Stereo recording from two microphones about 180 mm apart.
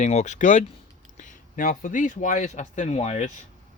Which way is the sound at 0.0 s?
40° left (ahead or behind).